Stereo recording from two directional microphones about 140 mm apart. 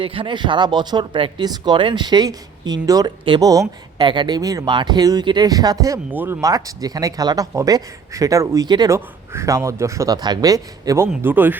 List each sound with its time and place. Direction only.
0.0 s speech: 40° right (ahead or behind)
6.1 s speech: 15° right (ahead or behind)
6.5 s speech: 25° right (ahead or behind)
9.0 s speech: 20° right (ahead or behind)